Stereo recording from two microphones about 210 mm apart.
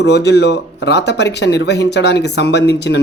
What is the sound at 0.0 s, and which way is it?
Speech, 55° left (ahead or behind).